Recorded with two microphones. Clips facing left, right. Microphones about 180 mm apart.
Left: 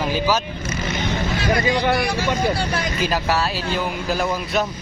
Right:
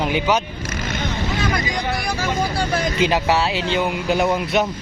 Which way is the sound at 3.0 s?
25° right (ahead or behind).